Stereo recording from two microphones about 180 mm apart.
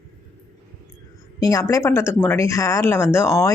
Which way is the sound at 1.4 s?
20° left (ahead or behind).